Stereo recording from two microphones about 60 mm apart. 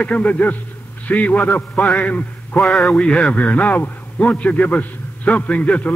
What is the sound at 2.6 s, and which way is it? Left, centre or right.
Speech, centre.